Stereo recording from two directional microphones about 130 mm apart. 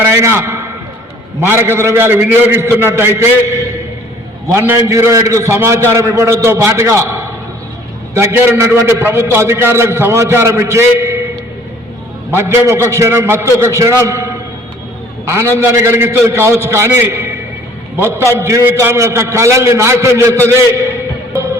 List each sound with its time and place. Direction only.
0.0 s a sound: 20° right (ahead or behind)
1.4 s a man's voice: 20° right (ahead or behind)
12.3 s a man's voice: 20° right (ahead or behind)
15.3 s a man's voice: 20° right (ahead or behind)